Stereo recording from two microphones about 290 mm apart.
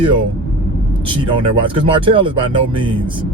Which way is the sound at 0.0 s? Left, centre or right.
Centre.